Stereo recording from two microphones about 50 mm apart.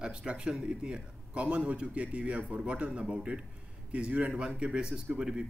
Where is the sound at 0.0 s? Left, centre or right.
Centre.